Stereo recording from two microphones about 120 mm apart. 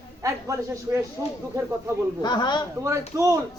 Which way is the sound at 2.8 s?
30° right (ahead or behind).